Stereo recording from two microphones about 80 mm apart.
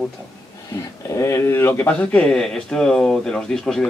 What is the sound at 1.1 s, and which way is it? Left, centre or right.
Speech, left.